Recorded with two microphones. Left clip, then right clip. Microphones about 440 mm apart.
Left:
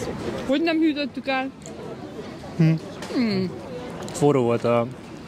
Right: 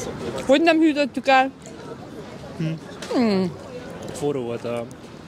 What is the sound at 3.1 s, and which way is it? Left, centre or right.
Speech, centre.